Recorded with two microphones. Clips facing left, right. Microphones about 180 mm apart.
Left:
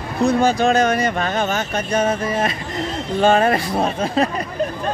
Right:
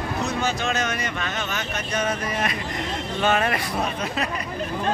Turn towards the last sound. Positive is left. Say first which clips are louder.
# left 7 dB
turn(degrees=30)  # may be behind; listen again after turning